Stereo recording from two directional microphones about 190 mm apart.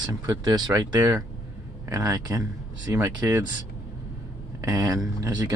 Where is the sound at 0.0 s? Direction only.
20° right (ahead or behind).